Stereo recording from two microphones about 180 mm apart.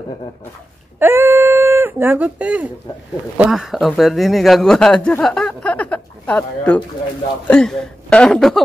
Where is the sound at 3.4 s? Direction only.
Centre (ahead or behind).